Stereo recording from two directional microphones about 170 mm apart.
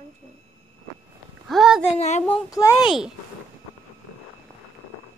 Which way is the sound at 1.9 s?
40° left (ahead or behind).